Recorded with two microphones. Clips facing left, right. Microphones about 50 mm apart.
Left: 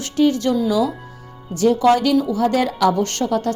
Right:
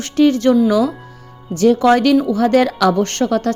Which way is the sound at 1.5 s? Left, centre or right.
Right.